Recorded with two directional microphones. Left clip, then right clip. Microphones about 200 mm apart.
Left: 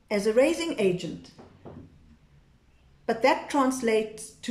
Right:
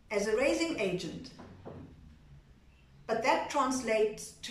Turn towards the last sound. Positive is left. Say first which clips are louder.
# right 3 dB
turn(degrees=40)  # may be behind; listen again after turning